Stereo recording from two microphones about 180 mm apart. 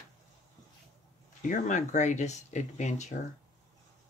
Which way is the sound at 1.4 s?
45° left (ahead or behind).